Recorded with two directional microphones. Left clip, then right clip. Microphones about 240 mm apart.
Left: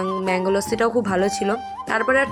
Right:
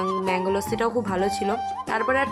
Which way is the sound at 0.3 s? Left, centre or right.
Centre.